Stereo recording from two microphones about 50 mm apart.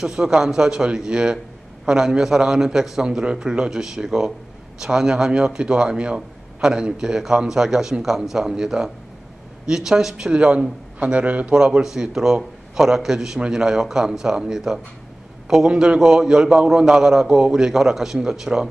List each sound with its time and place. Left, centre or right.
0.0 s a man's voice: centre
10.3 s a man's voice: right
11.5 s a man's voice: centre